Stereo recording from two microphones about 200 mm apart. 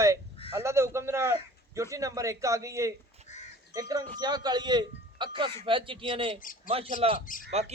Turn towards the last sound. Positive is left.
turn(degrees=-30)  # may be behind; listen again after turning